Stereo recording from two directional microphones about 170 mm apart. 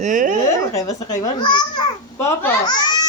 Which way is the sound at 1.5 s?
25° left (ahead or behind).